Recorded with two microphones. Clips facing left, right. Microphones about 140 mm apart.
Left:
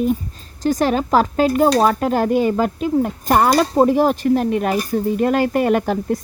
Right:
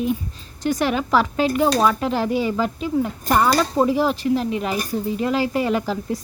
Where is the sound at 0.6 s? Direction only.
40° left (ahead or behind).